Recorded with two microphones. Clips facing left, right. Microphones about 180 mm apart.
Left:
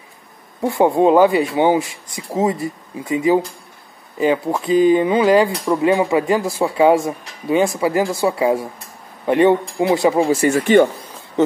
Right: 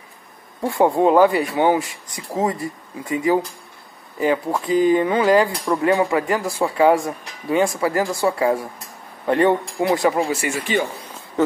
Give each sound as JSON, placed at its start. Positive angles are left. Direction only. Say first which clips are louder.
{"t": 0.7, "sound": "speech", "louder": "left 2 dB", "side_deg": 20}
{"t": 10.3, "sound": "speech", "louder": "left 9 dB", "side_deg": 50}